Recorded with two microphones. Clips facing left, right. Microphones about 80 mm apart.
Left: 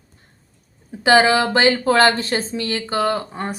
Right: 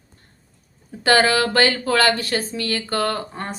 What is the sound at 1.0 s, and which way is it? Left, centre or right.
Speech, centre.